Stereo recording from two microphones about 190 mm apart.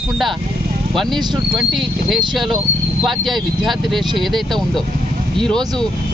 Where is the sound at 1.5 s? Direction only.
Centre (ahead or behind).